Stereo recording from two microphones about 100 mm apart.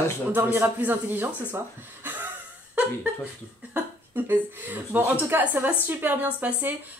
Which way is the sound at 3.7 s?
20° right (ahead or behind).